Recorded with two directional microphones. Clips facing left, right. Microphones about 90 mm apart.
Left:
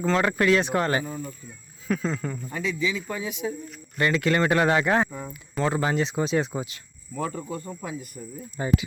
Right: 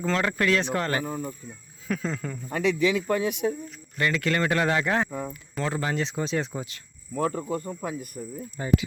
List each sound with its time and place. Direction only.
0.0 s speech: 10° left (ahead or behind)
1.0 s speech: 45° right (ahead or behind)
1.9 s speech: 5° left (ahead or behind)
2.5 s speech: 65° right (ahead or behind)
3.9 s speech: 20° left (ahead or behind)
7.2 s speech: 45° right (ahead or behind)
8.6 s speech: 20° left (ahead or behind)